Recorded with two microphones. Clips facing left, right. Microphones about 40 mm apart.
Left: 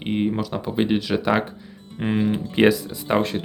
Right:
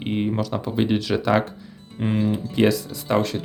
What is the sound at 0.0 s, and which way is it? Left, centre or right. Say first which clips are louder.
Speech: left 1 dB; centre.